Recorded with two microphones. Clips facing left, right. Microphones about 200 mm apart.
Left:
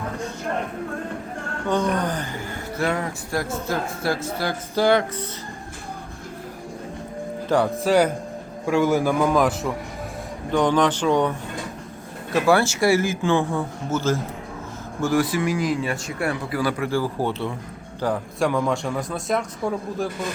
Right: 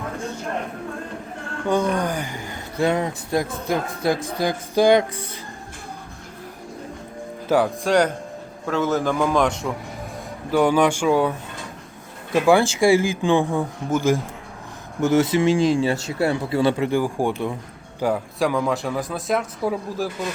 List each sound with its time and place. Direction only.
1.6 s speech: 10° right (ahead or behind)
7.4 s speech: 5° right (ahead or behind)
7.9 s a man's voice: 5° left (ahead or behind)
10.5 s a man's voice: 10° right (ahead or behind)